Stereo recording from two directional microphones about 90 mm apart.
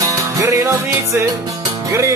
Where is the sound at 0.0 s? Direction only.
40° right (ahead or behind).